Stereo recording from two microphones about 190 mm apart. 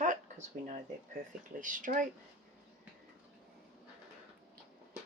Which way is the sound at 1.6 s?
45° right (ahead or behind).